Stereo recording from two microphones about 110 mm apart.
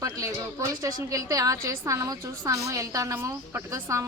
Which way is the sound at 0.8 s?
35° right (ahead or behind).